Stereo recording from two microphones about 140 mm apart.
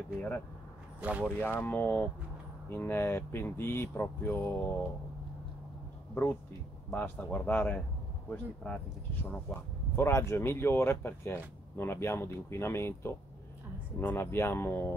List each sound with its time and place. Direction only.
1.2 s speech: 15° left (ahead or behind)
6.9 s speech: 10° left (ahead or behind)